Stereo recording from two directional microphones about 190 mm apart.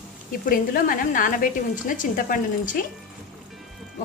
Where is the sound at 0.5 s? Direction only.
45° left (ahead or behind).